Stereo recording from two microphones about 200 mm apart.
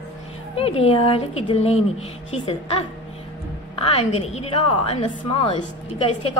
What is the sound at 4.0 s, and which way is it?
A woman's voice, 30° left (ahead or behind).